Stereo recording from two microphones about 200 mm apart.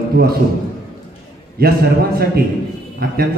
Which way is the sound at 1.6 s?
50° right (ahead or behind).